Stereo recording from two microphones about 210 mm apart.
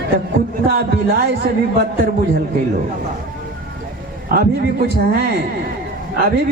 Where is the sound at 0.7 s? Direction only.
45° right (ahead or behind).